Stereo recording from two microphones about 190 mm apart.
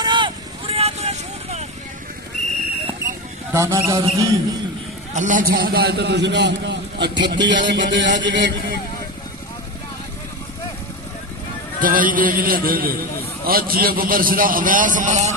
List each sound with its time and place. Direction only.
0.0 s vehicle: 25° right (ahead or behind)
3.5 s speech: 15° right (ahead or behind)
5.1 s a man's voice: 40° right (ahead or behind); by 8.8 s 65° right (ahead or behind)
11.8 s a man's voice: 45° right (ahead or behind)